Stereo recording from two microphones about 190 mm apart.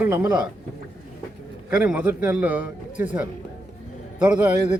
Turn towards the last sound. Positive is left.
turn(degrees=-5)  # may be behind; listen again after turning